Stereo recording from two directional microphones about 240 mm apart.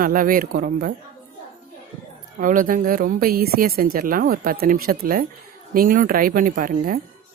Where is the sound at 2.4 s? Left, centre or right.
Right.